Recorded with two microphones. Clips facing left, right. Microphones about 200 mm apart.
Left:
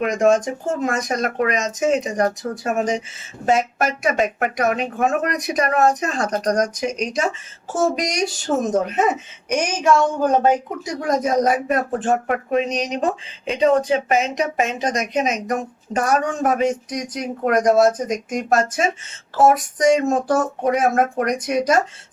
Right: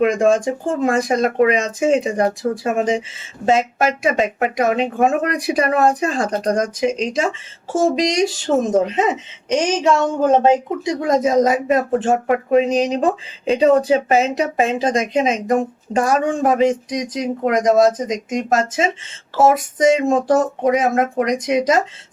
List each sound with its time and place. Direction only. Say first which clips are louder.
0.0 s a woman's voice: right 2 dB; 30° right (ahead or behind)